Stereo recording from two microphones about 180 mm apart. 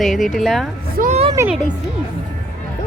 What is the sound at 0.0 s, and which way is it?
Speech, centre (ahead or behind).